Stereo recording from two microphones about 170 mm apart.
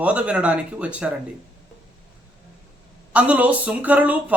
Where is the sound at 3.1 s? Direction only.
10° right (ahead or behind).